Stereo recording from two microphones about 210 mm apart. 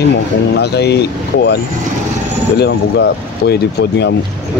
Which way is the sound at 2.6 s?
55° left (ahead or behind).